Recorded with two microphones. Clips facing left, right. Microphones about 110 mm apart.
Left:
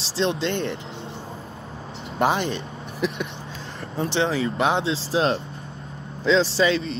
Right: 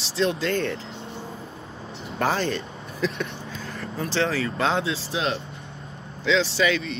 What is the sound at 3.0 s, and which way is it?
Speech, 25° left (ahead or behind).